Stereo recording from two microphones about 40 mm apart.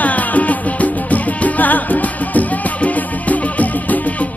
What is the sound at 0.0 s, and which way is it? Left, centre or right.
Music, left.